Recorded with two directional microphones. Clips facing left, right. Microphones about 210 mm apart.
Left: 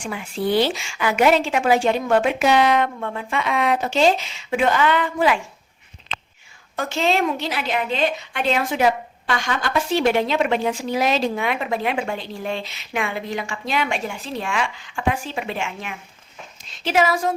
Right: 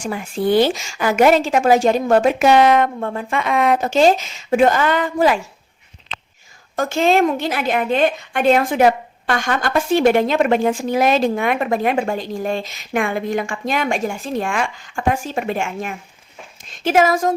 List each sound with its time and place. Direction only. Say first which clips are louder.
0.0 s a woman's voice: right 4 dB; 45° right (ahead or behind)
6.7 s a woman's voice: right 5 dB; 50° right (ahead or behind)